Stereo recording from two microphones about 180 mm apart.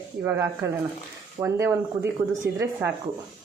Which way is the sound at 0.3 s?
15° right (ahead or behind).